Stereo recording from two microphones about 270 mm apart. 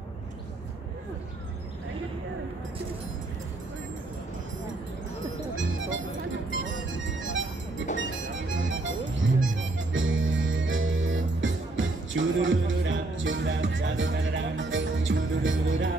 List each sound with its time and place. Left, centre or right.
5.6 s music: right
8.6 s music: right